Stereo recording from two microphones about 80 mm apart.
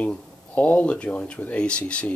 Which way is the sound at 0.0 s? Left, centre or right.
Centre.